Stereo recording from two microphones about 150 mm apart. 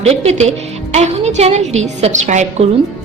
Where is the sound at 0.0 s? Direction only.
45° right (ahead or behind).